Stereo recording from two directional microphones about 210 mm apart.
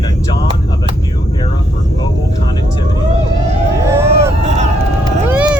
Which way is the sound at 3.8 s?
15° right (ahead or behind).